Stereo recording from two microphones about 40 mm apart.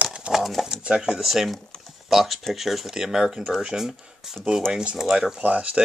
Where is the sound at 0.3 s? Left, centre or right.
Centre.